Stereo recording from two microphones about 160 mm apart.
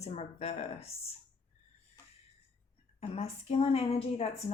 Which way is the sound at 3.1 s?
40° left (ahead or behind).